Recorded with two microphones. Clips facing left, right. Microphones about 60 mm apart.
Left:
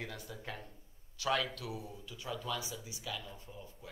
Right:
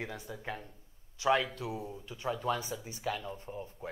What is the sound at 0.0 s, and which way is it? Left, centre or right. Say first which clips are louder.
Speech: right 4 dB; right.